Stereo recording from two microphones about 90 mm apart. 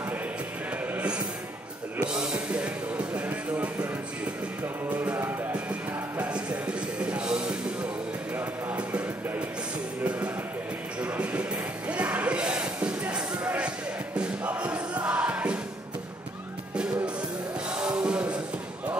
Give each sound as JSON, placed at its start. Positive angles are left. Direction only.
{"t": 0.9, "sound": "music", "side_deg": -10}
{"t": 11.0, "sound": "music", "side_deg": -10}
{"t": 11.9, "sound": "a sound", "side_deg": -15}
{"t": 14.1, "sound": "music", "side_deg": -15}
{"t": 16.7, "sound": "music", "side_deg": -10}